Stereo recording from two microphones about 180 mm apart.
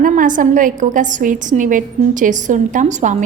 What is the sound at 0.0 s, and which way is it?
A woman's voice, 45° right (ahead or behind).